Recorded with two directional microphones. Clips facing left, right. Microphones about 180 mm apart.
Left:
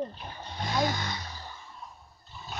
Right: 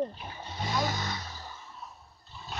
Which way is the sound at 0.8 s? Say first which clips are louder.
Left 3 dB; 5° right (ahead or behind).